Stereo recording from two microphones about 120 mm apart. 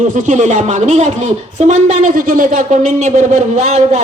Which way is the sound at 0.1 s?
90° right.